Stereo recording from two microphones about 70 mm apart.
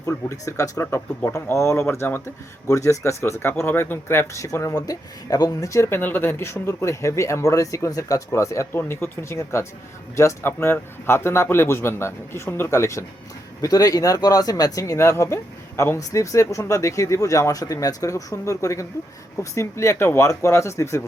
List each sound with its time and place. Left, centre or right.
0.0 s speech: left
2.6 s speech: left
3.5 s a man's voice: left
4.4 s speech: left
6.0 s speech: left
8.7 s a man's voice: left
13.6 s speech: left
16.0 s speech: left